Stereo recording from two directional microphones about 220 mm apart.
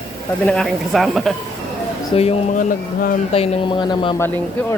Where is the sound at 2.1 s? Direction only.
25° left (ahead or behind).